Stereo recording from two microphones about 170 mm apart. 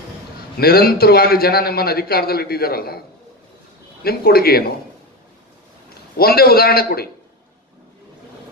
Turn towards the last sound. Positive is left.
turn(degrees=65)  # may be behind; listen again after turning